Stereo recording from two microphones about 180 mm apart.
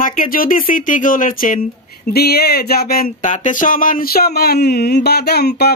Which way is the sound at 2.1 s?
60° left (ahead or behind).